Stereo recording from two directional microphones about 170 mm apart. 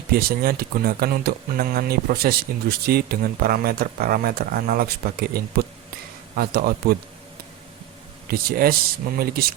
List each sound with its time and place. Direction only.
0.1 s speech: 60° right (ahead or behind)
8.3 s speech: 65° right (ahead or behind)